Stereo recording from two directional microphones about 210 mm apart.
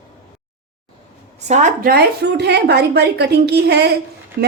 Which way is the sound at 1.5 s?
40° right (ahead or behind).